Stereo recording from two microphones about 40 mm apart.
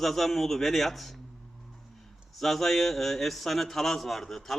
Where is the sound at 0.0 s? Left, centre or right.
Centre.